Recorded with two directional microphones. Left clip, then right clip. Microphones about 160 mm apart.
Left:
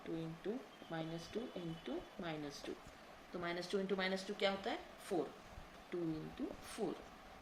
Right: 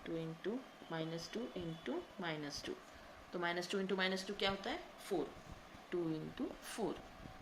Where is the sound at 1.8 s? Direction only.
40° right (ahead or behind).